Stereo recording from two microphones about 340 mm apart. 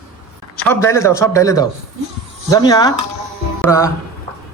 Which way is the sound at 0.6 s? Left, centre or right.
Centre.